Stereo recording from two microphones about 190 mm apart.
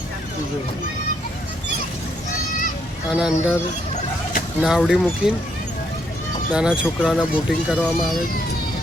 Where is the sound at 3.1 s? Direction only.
5° right (ahead or behind).